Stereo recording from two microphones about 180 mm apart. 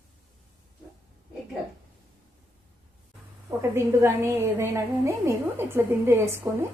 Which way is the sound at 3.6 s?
15° right (ahead or behind).